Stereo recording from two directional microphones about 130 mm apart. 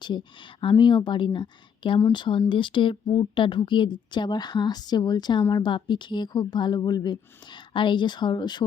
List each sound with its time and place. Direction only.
0.0 s speech: 35° left (ahead or behind)